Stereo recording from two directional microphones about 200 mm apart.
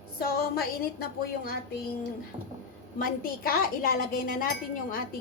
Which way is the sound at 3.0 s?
45° left (ahead or behind).